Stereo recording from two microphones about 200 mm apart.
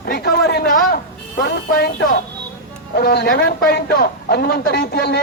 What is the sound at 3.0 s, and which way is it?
A man's voice, 50° left (ahead or behind).